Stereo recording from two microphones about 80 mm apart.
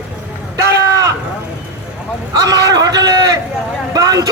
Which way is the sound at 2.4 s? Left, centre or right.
Right.